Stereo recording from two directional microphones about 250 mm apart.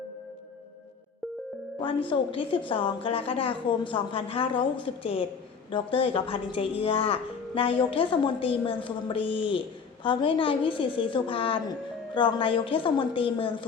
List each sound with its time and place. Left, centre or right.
2.0 s speech: centre